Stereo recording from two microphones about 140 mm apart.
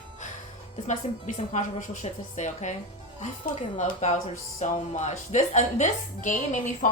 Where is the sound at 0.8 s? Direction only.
60° left (ahead or behind).